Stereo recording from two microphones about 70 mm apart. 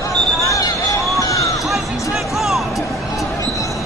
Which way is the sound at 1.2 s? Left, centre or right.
Left.